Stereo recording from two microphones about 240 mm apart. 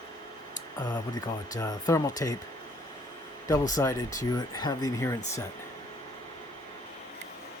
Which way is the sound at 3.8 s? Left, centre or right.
Centre.